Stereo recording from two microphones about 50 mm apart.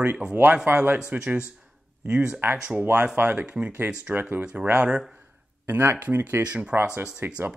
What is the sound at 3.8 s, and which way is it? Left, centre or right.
Speech, right.